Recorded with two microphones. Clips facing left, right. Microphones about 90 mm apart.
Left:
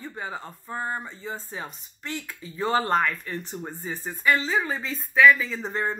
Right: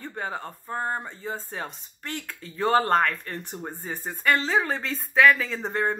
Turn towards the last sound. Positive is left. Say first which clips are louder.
# right 2 dB
turn(degrees=-55)  # may be behind; listen again after turning